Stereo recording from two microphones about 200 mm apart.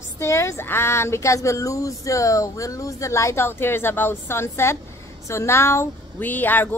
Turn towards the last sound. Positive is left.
turn(degrees=10)  # may be behind; listen again after turning